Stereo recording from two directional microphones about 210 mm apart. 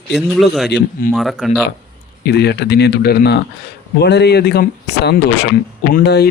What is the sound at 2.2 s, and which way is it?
Speech, 50° left (ahead or behind).